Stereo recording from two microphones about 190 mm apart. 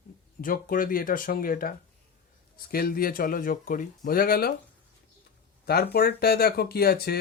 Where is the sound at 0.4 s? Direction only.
45° left (ahead or behind).